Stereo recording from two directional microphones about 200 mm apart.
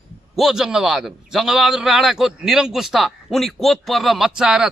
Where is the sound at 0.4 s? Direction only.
Centre (ahead or behind).